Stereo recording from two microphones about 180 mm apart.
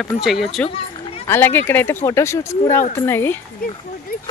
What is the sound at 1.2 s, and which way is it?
Speech, 15° left (ahead or behind).